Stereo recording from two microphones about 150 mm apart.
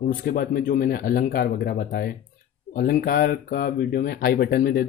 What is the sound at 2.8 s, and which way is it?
Speech, 70° left (ahead or behind).